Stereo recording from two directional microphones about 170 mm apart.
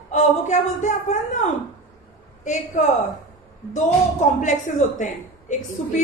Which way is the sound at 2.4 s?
45° left (ahead or behind).